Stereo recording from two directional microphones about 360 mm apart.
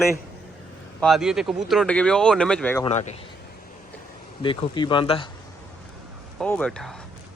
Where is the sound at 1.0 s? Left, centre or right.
Centre.